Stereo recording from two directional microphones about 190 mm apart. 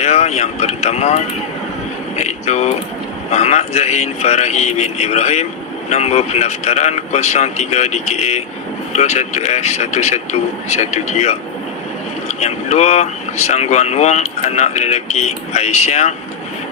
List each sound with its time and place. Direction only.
0.0 s speech: 35° left (ahead or behind)